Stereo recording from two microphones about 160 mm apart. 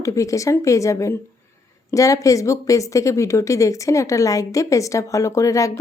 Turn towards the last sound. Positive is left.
turn(degrees=20)  # may be behind; listen again after turning